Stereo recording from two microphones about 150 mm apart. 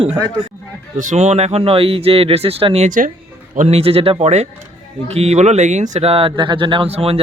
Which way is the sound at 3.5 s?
45° right (ahead or behind).